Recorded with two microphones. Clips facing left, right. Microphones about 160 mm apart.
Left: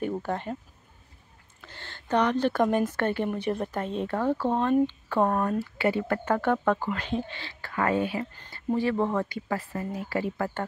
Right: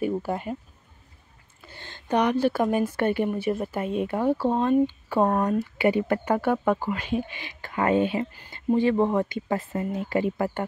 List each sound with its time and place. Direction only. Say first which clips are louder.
0.0 s speech: right 3 dB; 10° right (ahead or behind)
1.6 s a woman's voice: right 1 dB; 10° right (ahead or behind)
8.3 s speech: right 2 dB; 10° right (ahead or behind)
8.5 s speech: right 4 dB; 20° right (ahead or behind)